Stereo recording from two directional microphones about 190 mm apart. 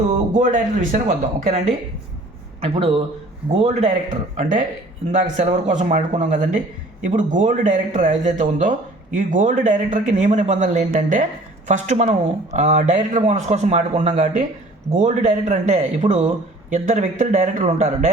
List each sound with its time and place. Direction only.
0.3 s a man's voice: 40° right (ahead or behind)
2.6 s a man's voice: 30° right (ahead or behind)